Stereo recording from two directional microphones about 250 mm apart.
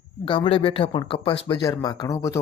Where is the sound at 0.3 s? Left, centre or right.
Left.